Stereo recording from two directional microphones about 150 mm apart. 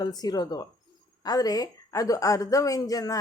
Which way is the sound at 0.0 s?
25° left (ahead or behind).